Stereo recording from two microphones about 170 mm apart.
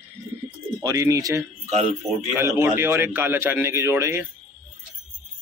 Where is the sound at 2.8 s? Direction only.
15° right (ahead or behind).